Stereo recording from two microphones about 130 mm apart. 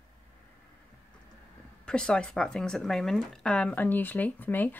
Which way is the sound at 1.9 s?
5° left (ahead or behind).